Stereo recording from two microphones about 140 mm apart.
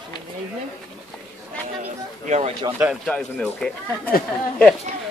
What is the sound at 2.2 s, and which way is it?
Speech, 55° right (ahead or behind).